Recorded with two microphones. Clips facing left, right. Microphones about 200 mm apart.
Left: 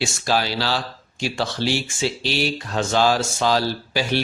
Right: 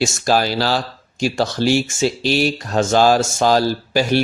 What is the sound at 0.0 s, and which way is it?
Speech, 45° right (ahead or behind).